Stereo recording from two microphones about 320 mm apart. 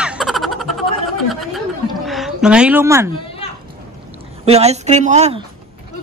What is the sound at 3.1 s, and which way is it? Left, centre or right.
Children playing, centre.